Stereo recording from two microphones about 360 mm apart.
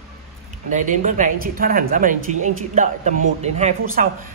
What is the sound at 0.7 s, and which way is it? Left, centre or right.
A man's voice, right.